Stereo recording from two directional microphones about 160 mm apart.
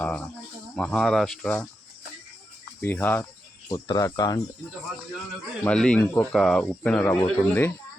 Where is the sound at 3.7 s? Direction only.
25° left (ahead or behind).